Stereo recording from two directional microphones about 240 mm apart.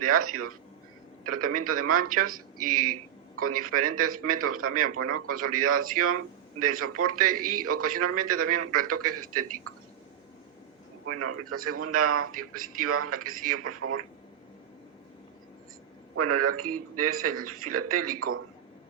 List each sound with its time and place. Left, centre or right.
0.0 s a man's voice: right
11.0 s a man's voice: right
16.1 s a man's voice: right